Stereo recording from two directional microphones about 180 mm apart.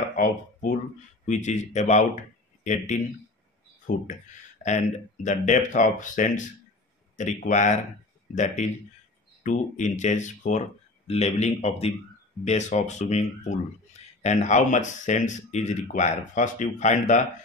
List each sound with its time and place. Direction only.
0.1 s speech: 50° left (ahead or behind)
4.6 s speech: 40° left (ahead or behind)
9.4 s speech: 45° left (ahead or behind)